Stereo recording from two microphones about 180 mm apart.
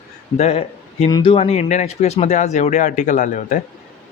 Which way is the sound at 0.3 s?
35° left (ahead or behind).